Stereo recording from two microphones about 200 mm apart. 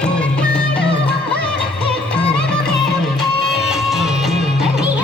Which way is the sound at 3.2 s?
Centre (ahead or behind).